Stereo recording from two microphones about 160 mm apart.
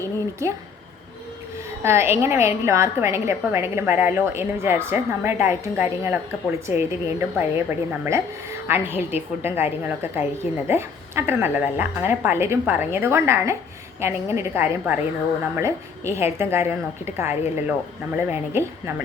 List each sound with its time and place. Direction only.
1.8 s speech: 15° right (ahead or behind)